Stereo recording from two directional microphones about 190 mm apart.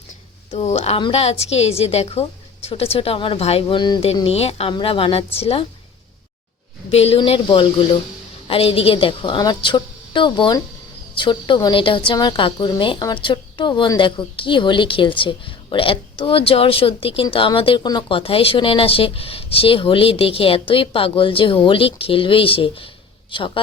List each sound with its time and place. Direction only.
0.5 s a woman's voice: 35° left (ahead or behind)
6.9 s a woman's voice: 30° left (ahead or behind)